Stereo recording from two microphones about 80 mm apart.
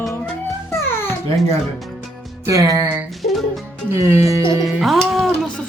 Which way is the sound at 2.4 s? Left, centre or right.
Right.